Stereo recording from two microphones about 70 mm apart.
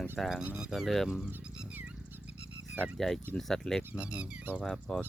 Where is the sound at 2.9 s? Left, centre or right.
Centre.